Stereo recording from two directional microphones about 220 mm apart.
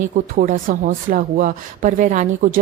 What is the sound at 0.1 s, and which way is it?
Speech, 40° right (ahead or behind).